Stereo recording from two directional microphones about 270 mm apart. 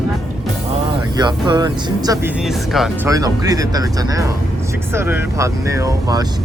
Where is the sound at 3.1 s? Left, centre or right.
Centre.